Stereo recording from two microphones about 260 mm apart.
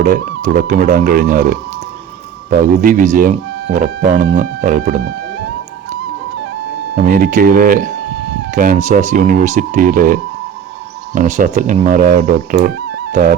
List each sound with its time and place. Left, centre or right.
0.0 s speech: right
6.9 s speech: right